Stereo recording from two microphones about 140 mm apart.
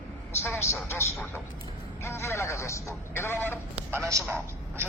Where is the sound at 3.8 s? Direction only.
15° right (ahead or behind).